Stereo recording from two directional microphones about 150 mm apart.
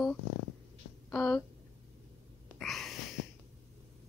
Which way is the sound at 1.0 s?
10° left (ahead or behind).